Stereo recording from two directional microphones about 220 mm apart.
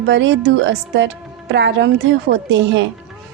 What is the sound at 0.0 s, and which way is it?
A woman's voice, 55° right (ahead or behind).